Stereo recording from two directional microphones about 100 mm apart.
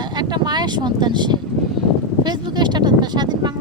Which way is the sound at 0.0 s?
45° right (ahead or behind).